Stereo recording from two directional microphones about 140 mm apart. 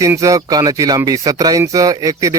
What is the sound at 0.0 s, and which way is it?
A man's voice, 25° right (ahead or behind).